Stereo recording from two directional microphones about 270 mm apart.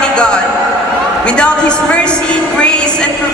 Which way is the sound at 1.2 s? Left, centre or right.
Centre.